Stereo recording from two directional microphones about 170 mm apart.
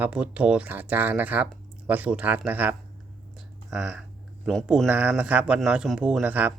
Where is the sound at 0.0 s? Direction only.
5° right (ahead or behind).